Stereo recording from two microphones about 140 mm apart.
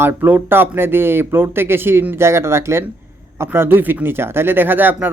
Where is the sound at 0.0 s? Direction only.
15° right (ahead or behind).